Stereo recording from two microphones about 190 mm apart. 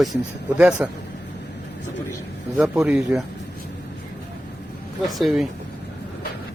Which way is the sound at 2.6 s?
5° right (ahead or behind).